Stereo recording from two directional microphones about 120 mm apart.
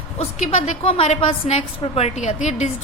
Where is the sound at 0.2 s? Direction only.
75° left (ahead or behind).